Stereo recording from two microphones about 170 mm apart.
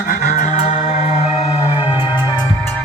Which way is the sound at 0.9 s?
40° left (ahead or behind).